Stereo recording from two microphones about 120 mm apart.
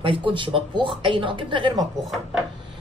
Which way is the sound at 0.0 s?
45° right (ahead or behind).